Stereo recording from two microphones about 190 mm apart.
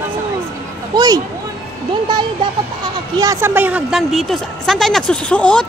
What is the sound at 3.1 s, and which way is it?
A woman's voice, 15° right (ahead or behind).